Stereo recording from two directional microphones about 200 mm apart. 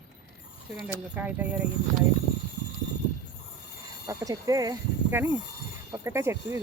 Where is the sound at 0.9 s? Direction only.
5° right (ahead or behind).